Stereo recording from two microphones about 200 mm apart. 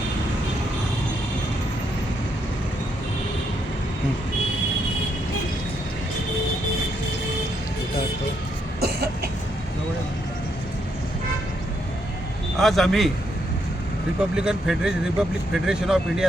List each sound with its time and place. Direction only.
8.8 s cough: 50° right (ahead or behind)
12.5 s a man's voice: centre (ahead or behind)
14.2 s speech: 5° right (ahead or behind)